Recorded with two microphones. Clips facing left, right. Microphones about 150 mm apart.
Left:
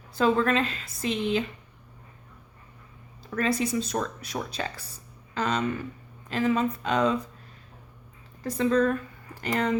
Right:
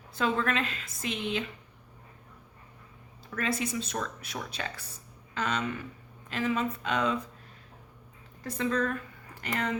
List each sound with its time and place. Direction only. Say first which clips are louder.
0.1 s speech: left 6 dB; 35° left (ahead or behind)
3.3 s speech: left 5 dB; 35° left (ahead or behind)
8.4 s speech: left 6 dB; 30° left (ahead or behind)